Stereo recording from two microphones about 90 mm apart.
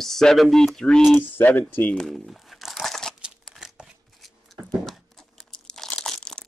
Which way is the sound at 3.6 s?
5° right (ahead or behind).